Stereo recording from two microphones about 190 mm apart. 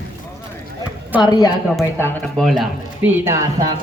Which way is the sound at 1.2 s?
20° left (ahead or behind).